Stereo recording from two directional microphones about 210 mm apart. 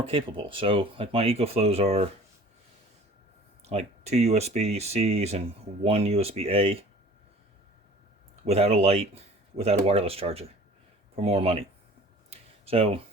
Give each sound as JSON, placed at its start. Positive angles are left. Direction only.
{"t": 0.0, "sound": "speech", "side_deg": -25}
{"t": 3.6, "sound": "speech", "side_deg": -30}
{"t": 8.4, "sound": "speech", "side_deg": -30}
{"t": 12.3, "sound": "a sound", "side_deg": -25}